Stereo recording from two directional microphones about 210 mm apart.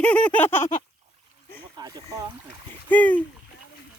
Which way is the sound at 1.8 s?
15° right (ahead or behind).